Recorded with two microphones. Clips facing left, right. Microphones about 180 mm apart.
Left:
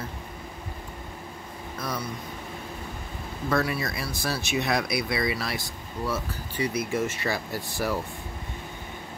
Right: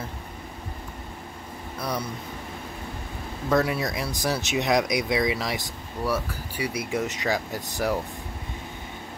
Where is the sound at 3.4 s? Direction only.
15° right (ahead or behind).